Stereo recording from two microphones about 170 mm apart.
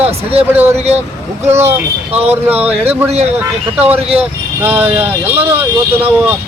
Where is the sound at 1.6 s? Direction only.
10° right (ahead or behind).